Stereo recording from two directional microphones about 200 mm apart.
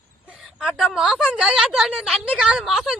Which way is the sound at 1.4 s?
5° right (ahead or behind).